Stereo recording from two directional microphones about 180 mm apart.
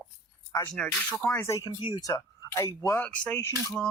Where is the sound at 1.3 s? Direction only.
15° left (ahead or behind).